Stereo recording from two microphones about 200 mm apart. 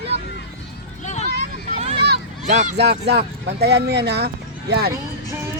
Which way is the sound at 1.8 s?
30° right (ahead or behind).